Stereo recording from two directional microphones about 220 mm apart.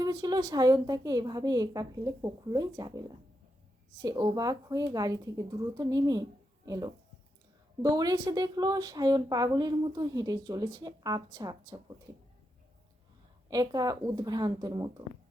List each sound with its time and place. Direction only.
0.0 s a woman's voice: 15° right (ahead or behind)
13.5 s a woman's voice: 20° right (ahead or behind)